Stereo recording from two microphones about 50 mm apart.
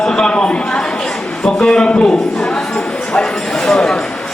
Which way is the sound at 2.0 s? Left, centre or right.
Centre.